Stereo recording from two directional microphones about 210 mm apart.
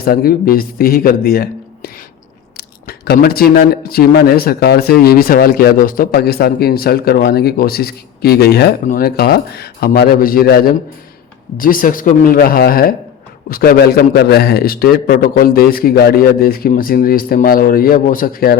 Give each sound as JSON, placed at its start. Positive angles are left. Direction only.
{"t": 0.0, "sound": "speech", "side_deg": 45}